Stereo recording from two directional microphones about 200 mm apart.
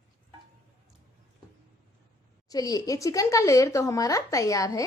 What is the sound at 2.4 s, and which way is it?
Speech, 20° left (ahead or behind).